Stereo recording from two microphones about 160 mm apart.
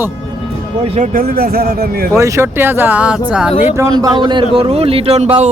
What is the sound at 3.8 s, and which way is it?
A man's voice, 25° right (ahead or behind).